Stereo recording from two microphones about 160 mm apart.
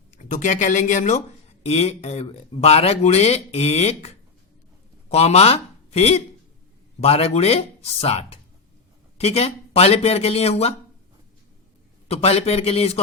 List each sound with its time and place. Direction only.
0.2 s speech: 50° left (ahead or behind)
12.0 s speech: 40° left (ahead or behind)